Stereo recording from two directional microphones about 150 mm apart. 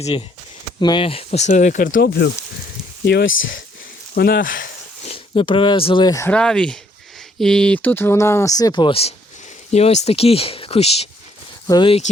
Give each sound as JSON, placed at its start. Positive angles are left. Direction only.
{"t": 0.8, "sound": "speech", "side_deg": 30}
{"t": 3.0, "sound": "speech", "side_deg": 90}
{"t": 4.1, "sound": "speech", "side_deg": 80}
{"t": 5.0, "sound": "speech", "side_deg": 40}
{"t": 6.3, "sound": "speech", "side_deg": 5}
{"t": 11.7, "sound": "speech", "side_deg": 30}